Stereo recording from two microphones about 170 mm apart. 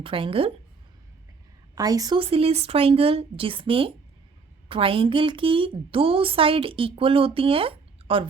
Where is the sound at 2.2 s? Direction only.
35° right (ahead or behind).